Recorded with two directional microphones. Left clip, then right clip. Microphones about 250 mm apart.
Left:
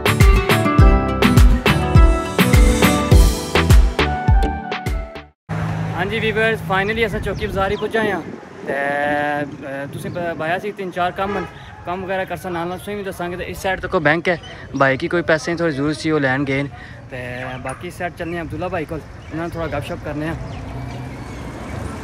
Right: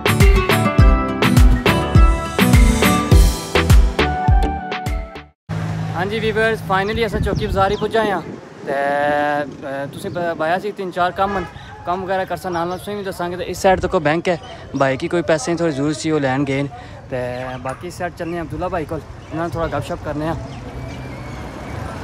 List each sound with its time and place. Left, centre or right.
0.0 s music: centre
6.3 s speech: centre
13.6 s speech: right
13.8 s speech: centre